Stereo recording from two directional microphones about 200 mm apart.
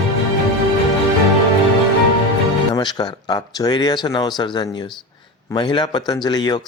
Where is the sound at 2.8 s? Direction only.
20° left (ahead or behind).